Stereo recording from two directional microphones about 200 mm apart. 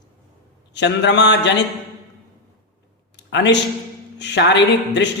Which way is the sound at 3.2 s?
60° left (ahead or behind).